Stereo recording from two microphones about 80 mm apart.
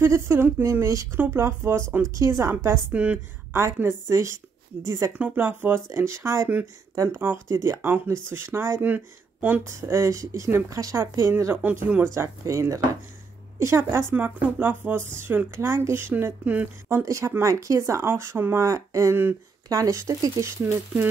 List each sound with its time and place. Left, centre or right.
0.0 s speech: right
1.1 s speech: right
2.0 s speech: right
2.9 s a woman's voice: centre
3.5 s speech: right
5.1 s speech: right
7.4 s speech: right
7.8 s speech: right
9.7 s speech: right
11.2 s speech: right
14.1 s speech: right
17.0 s speech: right
20.6 s speech: centre